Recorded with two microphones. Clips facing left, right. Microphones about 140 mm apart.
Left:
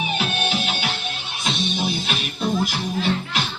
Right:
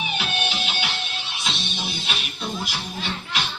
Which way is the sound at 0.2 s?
45° left (ahead or behind).